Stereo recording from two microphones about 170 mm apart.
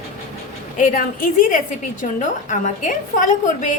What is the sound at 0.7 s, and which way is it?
Speech, 50° left (ahead or behind).